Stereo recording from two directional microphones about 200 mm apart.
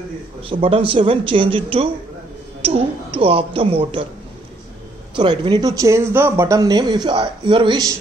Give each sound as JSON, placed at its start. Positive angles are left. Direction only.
{"t": 0.4, "sound": "speech", "side_deg": -25}
{"t": 5.1, "sound": "speech", "side_deg": -25}